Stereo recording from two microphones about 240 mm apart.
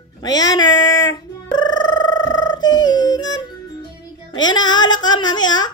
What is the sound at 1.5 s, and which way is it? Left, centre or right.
Music, centre.